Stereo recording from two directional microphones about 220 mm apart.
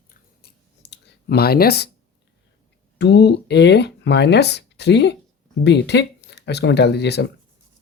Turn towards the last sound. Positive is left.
turn(degrees=50)  # may be behind; listen again after turning